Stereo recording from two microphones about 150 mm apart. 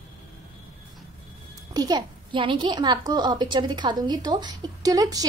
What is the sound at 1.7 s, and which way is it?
A woman's voice, 25° right (ahead or behind).